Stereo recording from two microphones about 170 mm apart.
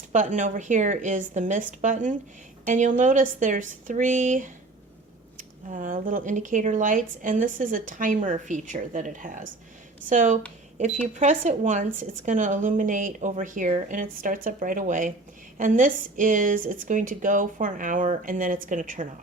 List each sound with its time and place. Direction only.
0.1 s speech: 45° right (ahead or behind)